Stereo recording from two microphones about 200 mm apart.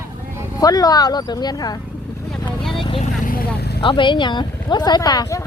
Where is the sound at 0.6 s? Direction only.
20° left (ahead or behind).